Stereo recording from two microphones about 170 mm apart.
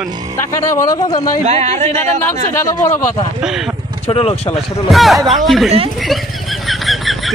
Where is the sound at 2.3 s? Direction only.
15° left (ahead or behind).